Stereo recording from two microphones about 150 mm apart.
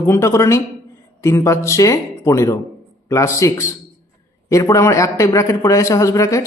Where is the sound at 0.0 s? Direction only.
20° left (ahead or behind).